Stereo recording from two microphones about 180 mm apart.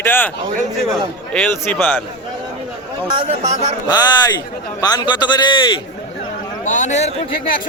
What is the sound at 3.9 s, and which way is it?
A man's voice, 20° left (ahead or behind).